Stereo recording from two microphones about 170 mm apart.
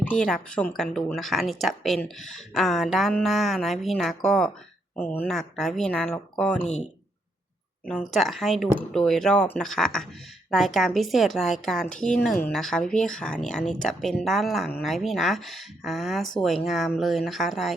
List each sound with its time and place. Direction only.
0.0 s speech: 5° left (ahead or behind)
6.6 s speech: 40° left (ahead or behind)
7.9 s speech: 5° left (ahead or behind)